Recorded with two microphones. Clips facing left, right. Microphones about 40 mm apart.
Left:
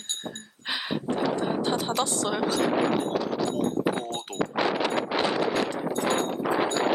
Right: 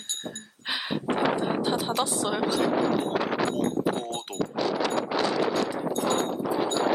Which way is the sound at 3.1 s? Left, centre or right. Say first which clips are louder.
Right 1 dB; right.